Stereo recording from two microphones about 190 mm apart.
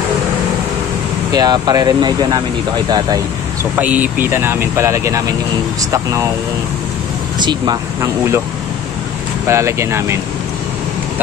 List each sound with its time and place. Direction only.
1.3 s speech: 20° right (ahead or behind)
3.7 s speech: 10° right (ahead or behind)
7.3 s speech: 20° right (ahead or behind)
9.5 s speech: 15° right (ahead or behind)